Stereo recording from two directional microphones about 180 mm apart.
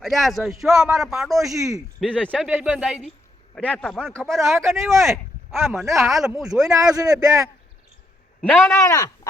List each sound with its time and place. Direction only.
0.0 s a man's voice: centre (ahead or behind)
1.5 s speech: 20° right (ahead or behind)
2.0 s a man's voice: 5° left (ahead or behind)
2.5 s a man's voice: 10° right (ahead or behind)
5.8 s speech: 15° right (ahead or behind)
6.1 s a man's voice: centre (ahead or behind)
6.7 s a man's voice: 20° right (ahead or behind)
8.7 s speech: 20° left (ahead or behind)